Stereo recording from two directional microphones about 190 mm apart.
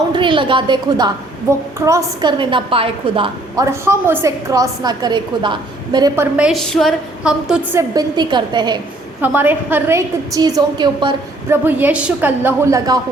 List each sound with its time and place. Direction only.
0.1 s a woman's voice: 25° right (ahead or behind)
3.5 s a woman's voice: 15° right (ahead or behind)
6.3 s a woman's voice: 5° right (ahead or behind); by 8.8 s 25° right (ahead or behind)
9.2 s a woman's voice: 10° right (ahead or behind)
11.5 s a woman's voice: 10° right (ahead or behind)